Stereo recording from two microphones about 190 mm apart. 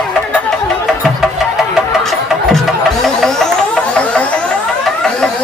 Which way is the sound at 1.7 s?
Centre (ahead or behind).